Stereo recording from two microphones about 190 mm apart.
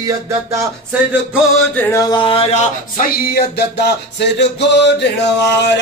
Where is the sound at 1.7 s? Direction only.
10° left (ahead or behind); by 5.1 s 65° left (ahead or behind).